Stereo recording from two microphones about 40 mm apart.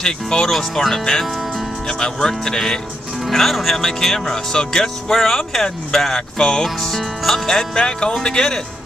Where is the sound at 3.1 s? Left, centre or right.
Centre.